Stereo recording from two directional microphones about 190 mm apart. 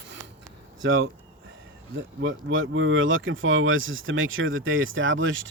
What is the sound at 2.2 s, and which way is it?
Speech, 90° right.